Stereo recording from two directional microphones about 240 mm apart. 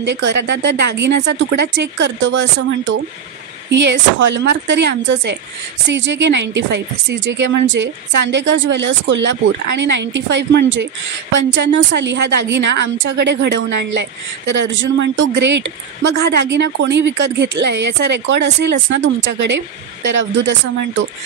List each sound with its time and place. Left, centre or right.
0.0 s speech: right